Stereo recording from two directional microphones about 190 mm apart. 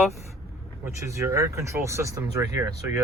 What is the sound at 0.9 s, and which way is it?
Speech, 15° right (ahead or behind).